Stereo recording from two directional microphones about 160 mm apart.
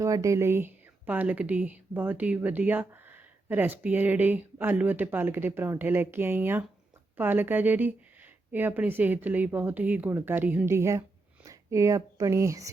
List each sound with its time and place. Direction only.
0.0 s speech: 20° right (ahead or behind)